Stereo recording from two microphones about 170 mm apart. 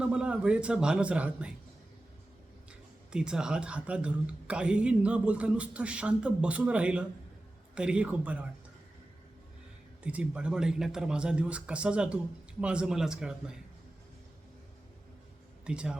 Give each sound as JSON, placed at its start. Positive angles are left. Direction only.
{"t": 0.0, "sound": "a man's voice", "side_deg": -5}
{"t": 3.1, "sound": "a woman's voice", "side_deg": -5}
{"t": 10.0, "sound": "a man's voice", "side_deg": -5}
{"t": 15.6, "sound": "a man's voice", "side_deg": -5}